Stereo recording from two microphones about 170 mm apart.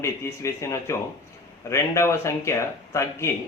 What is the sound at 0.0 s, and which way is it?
A man's voice, 15° left (ahead or behind).